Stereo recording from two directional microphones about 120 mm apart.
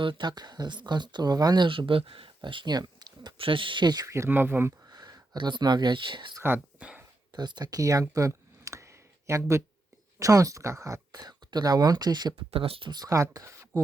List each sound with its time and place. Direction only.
0.0 s speech: 40° right (ahead or behind); by 4.7 s 20° right (ahead or behind)
4.9 s speech: 35° right (ahead or behind)
6.4 s speech: 15° right (ahead or behind)
7.3 s a sound: 35° right (ahead or behind)
10.2 s speech: 30° right (ahead or behind)
12.5 s speech: 50° right (ahead or behind)
12.9 s speech: 30° right (ahead or behind)